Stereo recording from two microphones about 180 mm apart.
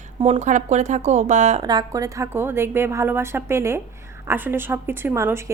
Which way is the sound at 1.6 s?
25° right (ahead or behind).